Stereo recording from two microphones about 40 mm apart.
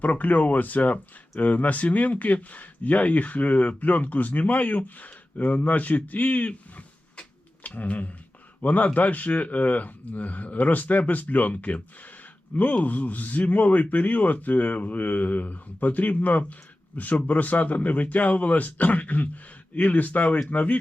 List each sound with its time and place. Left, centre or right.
0.0 s speech: left